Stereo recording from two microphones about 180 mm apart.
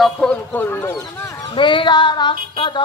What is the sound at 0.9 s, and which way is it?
Speech, 20° left (ahead or behind).